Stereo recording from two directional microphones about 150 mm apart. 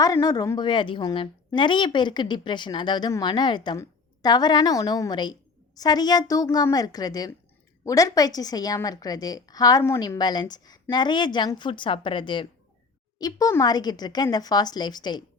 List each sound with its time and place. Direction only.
0.0 s a woman's voice: 25° left (ahead or behind)